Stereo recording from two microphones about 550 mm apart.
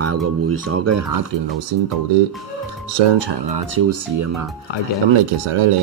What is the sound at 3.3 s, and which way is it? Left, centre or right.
Speech, right.